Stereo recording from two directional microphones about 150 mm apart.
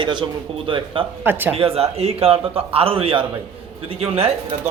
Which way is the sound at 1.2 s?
15° right (ahead or behind).